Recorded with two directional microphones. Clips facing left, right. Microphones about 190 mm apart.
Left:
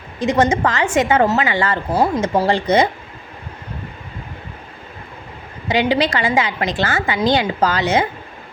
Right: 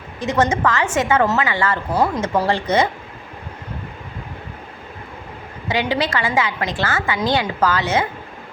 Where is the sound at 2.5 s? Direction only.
15° left (ahead or behind).